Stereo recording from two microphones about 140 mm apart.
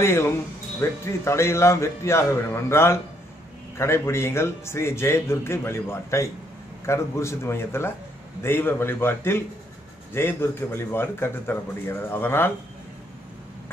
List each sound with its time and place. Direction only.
0.0 s a man's voice: 20° left (ahead or behind)